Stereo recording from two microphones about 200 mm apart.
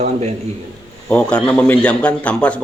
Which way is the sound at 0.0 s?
30° right (ahead or behind).